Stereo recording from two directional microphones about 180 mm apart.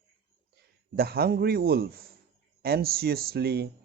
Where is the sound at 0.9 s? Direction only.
60° right (ahead or behind).